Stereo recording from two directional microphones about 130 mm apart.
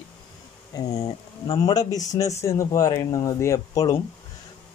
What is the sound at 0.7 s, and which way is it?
Speech, 25° left (ahead or behind).